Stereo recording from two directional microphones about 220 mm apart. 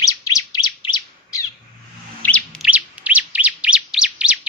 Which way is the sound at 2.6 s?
5° right (ahead or behind).